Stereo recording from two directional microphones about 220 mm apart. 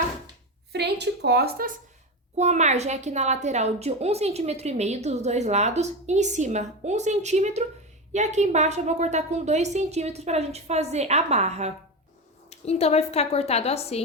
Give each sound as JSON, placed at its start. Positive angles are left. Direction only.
{"t": 0.7, "sound": "a sound", "side_deg": -50}
{"t": 2.4, "sound": "a woman's voice", "side_deg": -30}
{"t": 12.5, "sound": "speech", "side_deg": 30}